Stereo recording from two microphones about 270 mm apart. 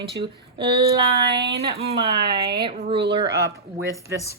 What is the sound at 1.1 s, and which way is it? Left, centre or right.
Speech, right.